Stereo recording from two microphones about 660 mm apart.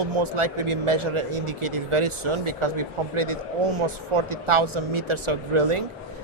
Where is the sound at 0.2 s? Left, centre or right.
Right.